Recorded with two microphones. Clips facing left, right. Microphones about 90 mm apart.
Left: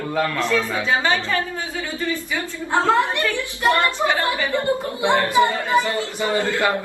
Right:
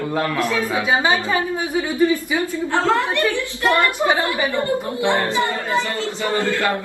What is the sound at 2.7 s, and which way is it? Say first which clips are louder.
A man's voice: left 1 dB; 20° left (ahead or behind).